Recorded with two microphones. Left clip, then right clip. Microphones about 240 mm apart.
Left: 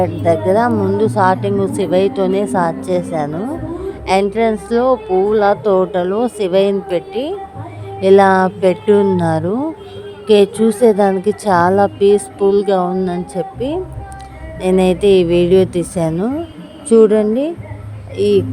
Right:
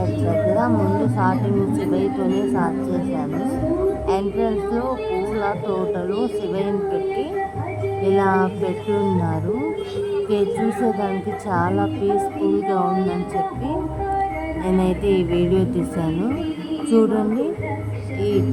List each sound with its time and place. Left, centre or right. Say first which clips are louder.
0.3 s a woman's voice: left 6 dB; left